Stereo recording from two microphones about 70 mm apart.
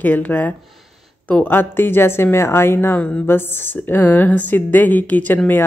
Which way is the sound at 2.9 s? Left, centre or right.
Centre.